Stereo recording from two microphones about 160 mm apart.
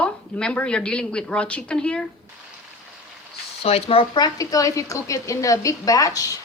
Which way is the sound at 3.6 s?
35° left (ahead or behind).